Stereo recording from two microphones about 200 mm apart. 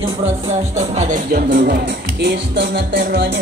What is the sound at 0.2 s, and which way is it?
Music, 35° right (ahead or behind).